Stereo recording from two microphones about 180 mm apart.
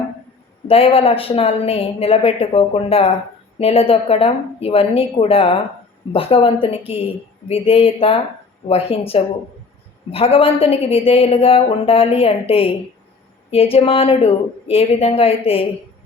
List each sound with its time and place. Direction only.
0.7 s a woman's voice: 35° left (ahead or behind)